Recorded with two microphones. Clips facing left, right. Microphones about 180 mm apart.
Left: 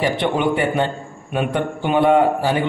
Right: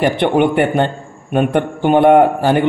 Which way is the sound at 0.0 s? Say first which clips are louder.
Right 5 dB; 60° right (ahead or behind).